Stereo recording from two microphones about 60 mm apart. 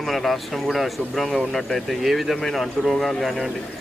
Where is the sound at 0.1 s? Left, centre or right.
Centre.